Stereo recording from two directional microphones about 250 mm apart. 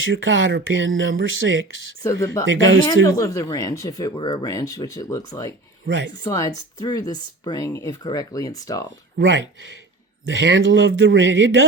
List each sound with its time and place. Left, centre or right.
0.0 s speech: right
2.8 s speech: centre
9.1 s speech: right